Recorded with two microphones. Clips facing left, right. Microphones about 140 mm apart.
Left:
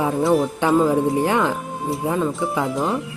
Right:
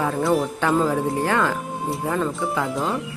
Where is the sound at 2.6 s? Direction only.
Centre (ahead or behind).